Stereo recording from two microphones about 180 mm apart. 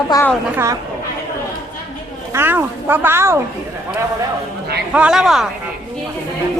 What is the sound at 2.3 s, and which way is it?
Speech, 15° right (ahead or behind).